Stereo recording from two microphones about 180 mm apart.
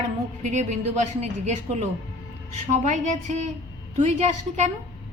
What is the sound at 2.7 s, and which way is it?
A woman's voice, 45° right (ahead or behind).